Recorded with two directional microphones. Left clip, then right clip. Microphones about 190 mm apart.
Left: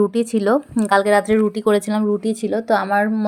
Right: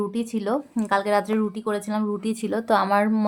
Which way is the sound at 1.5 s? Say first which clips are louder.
Left 9 dB; 30° left (ahead or behind).